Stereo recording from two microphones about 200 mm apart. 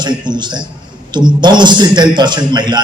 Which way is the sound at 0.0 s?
20° right (ahead or behind).